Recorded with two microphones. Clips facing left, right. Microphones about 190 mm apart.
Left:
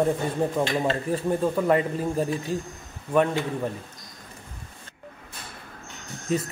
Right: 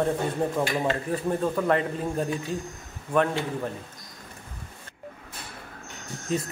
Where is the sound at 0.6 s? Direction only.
25° left (ahead or behind).